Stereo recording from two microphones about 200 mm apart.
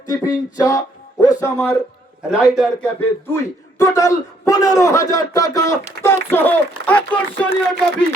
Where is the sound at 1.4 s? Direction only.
15° left (ahead or behind).